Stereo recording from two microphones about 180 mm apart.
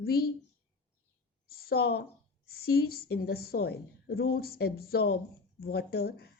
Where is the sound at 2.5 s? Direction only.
60° left (ahead or behind).